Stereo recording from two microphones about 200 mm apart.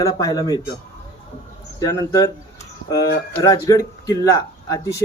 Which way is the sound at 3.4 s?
15° left (ahead or behind).